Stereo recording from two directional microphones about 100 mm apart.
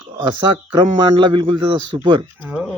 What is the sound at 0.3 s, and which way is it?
Speech, 55° right (ahead or behind).